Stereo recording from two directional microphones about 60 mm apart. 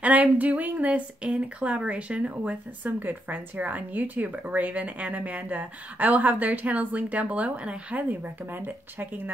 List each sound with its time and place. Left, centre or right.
0.0 s speech: right
8.1 s speech: right